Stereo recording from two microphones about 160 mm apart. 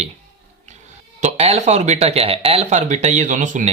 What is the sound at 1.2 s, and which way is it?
Speech, 45° right (ahead or behind).